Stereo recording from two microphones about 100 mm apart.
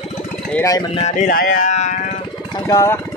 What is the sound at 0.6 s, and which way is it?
Speech, 35° left (ahead or behind).